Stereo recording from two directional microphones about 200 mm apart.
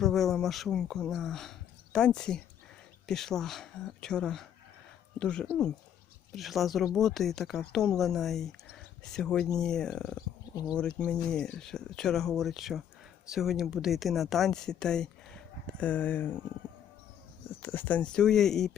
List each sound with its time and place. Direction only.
0.0 s speech: centre (ahead or behind)
10.5 s speech: 20° left (ahead or behind)
10.8 s speech: 5° left (ahead or behind)
17.6 s speech: 10° left (ahead or behind)